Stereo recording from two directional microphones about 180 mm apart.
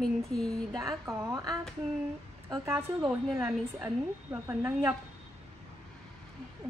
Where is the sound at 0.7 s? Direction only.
15° right (ahead or behind).